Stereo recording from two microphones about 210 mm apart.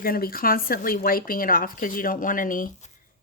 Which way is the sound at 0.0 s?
45° left (ahead or behind).